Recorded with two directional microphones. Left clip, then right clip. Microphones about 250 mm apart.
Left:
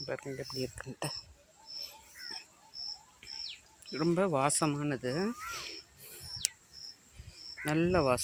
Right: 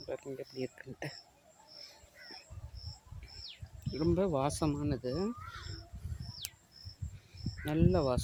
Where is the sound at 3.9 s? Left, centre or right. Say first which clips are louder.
Left 2 dB; centre.